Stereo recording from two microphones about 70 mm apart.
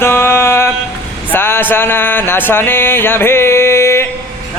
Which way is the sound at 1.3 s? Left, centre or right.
Left.